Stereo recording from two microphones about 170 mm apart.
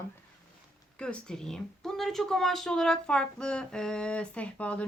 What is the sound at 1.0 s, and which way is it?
A woman's voice, 5° left (ahead or behind).